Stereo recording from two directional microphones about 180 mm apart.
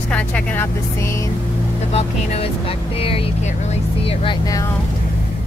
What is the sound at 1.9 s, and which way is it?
Speech, 35° left (ahead or behind).